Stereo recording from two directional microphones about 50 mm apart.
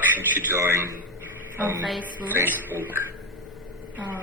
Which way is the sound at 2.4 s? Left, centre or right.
Right.